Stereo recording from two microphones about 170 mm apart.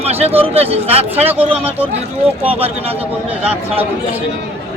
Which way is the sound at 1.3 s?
10° right (ahead or behind).